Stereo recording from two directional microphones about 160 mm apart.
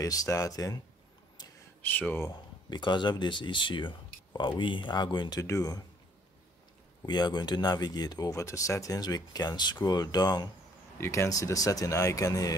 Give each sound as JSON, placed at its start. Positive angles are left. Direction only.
{"t": 0.0, "sound": "speech", "side_deg": 20}
{"t": 1.8, "sound": "speech", "side_deg": 10}
{"t": 2.7, "sound": "speech", "side_deg": 30}
{"t": 7.1, "sound": "speech", "side_deg": 25}